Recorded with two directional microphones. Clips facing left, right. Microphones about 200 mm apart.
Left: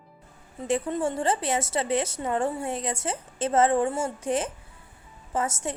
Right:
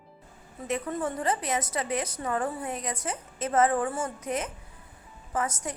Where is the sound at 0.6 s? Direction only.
30° left (ahead or behind).